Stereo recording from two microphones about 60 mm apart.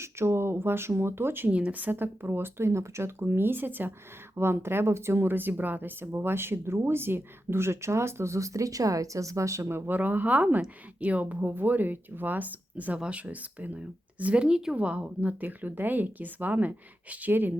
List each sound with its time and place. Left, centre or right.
0.0 s a woman's voice: right
1.5 s a woman's voice: right